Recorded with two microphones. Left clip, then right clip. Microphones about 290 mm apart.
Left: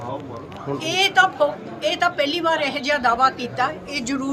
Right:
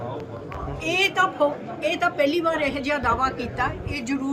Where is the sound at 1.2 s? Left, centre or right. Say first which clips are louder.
Left 4 dB; centre.